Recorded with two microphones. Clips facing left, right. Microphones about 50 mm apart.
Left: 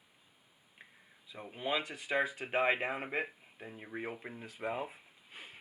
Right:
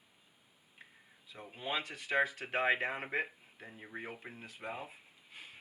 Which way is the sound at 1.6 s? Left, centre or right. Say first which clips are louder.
Left 2 dB; centre.